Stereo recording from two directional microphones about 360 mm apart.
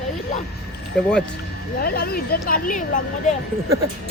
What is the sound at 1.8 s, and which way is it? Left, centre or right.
Speech, left.